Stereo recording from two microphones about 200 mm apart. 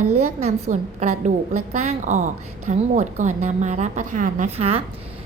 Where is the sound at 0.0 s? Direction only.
90° right.